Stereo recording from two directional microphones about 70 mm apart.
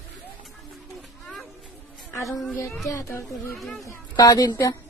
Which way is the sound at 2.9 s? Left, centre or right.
Left.